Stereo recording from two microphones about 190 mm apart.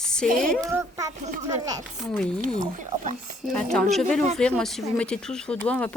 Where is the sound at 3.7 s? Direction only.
Centre (ahead or behind).